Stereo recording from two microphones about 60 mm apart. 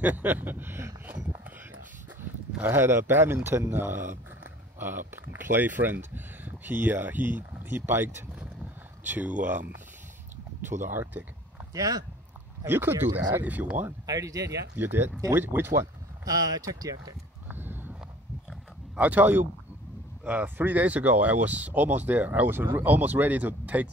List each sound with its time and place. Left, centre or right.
0.0 s speech: right
2.6 s speech: right
9.0 s speech: right
10.6 s speech: right
11.7 s speech: right
12.6 s speech: right
13.4 s speech: right
14.0 s speech: right
14.8 s speech: right
16.3 s speech: right
17.5 s a sound: right
18.9 s speech: right